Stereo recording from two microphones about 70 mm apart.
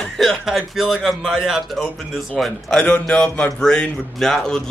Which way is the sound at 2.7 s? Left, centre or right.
Centre.